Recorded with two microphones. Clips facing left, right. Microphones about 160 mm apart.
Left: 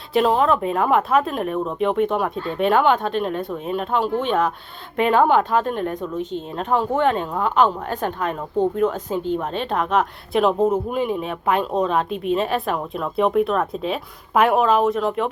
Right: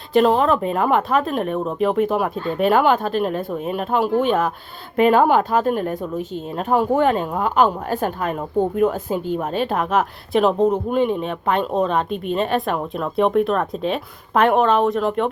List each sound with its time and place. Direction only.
0.1 s a woman's voice: centre (ahead or behind)